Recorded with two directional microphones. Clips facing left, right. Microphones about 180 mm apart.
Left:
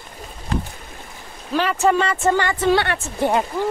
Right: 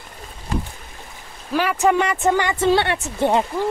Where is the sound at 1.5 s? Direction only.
10° right (ahead or behind).